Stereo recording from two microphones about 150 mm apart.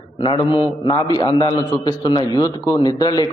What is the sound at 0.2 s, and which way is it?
A man's voice, 35° left (ahead or behind).